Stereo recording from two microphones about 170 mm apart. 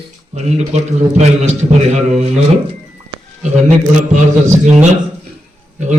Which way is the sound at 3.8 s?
45° right (ahead or behind).